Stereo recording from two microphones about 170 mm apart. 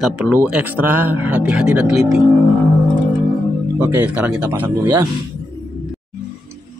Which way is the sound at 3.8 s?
10° right (ahead or behind).